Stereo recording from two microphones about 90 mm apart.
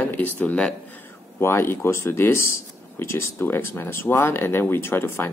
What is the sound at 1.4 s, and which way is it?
Speech, 30° left (ahead or behind).